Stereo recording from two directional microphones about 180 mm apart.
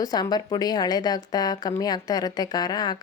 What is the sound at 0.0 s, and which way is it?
A woman's voice, 20° left (ahead or behind).